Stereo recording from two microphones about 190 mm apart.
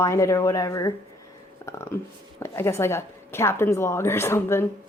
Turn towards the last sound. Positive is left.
turn(degrees=15)  # may be behind; listen again after turning